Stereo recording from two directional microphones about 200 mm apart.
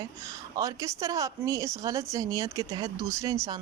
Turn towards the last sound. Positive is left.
turn(degrees=-15)  # may be behind; listen again after turning